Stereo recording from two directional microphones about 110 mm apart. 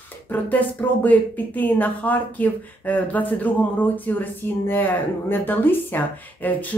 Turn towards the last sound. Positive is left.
turn(degrees=15)  # may be behind; listen again after turning